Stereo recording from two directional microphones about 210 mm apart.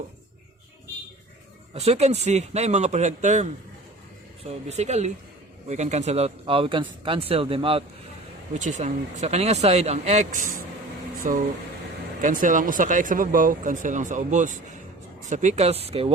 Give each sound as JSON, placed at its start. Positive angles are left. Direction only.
{"t": 1.7, "sound": "speech", "side_deg": -30}
{"t": 4.7, "sound": "speech", "side_deg": -30}